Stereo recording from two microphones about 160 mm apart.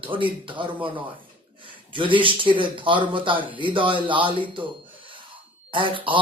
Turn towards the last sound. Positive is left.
turn(degrees=-30)  # may be behind; listen again after turning